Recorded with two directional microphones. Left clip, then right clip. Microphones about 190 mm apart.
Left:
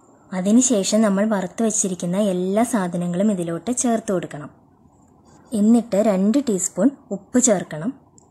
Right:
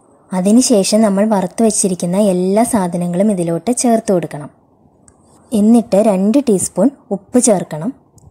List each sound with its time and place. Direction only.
0.3 s a woman's voice: 15° right (ahead or behind)
5.8 s a woman's voice: 20° right (ahead or behind)